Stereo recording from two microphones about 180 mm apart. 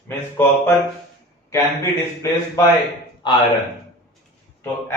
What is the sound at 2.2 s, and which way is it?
Speech, 15° left (ahead or behind).